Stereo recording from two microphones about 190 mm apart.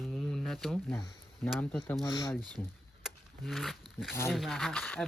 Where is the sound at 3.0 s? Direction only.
Centre (ahead or behind).